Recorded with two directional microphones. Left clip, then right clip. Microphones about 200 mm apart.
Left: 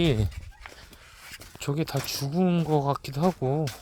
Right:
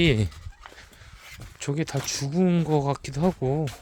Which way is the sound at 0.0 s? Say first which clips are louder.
Right 3 dB; 25° right (ahead or behind).